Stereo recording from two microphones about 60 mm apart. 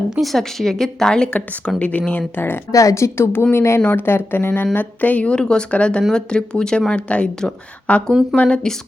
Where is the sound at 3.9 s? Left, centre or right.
Left; by 8.7 s centre.